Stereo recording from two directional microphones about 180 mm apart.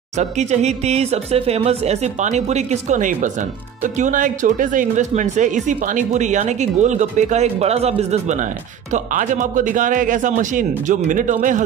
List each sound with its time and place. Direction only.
0.2 s speech: 40° right (ahead or behind)